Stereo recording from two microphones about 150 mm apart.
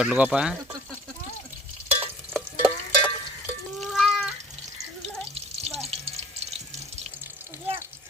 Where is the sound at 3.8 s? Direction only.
Centre (ahead or behind).